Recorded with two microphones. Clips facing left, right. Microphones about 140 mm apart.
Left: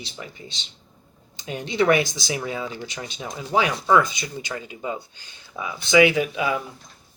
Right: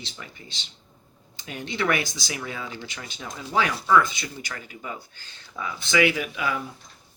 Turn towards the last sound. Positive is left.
turn(degrees=25)  # may be behind; listen again after turning